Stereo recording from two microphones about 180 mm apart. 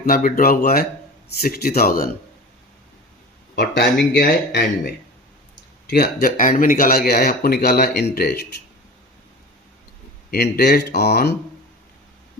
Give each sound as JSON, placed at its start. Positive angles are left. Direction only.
{"t": 0.1, "sound": "speech", "side_deg": 50}
{"t": 3.5, "sound": "speech", "side_deg": 70}
{"t": 5.9, "sound": "speech", "side_deg": 60}
{"t": 10.3, "sound": "speech", "side_deg": 60}